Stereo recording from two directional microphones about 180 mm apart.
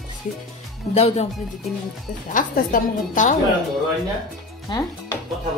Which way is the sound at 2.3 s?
45° left (ahead or behind).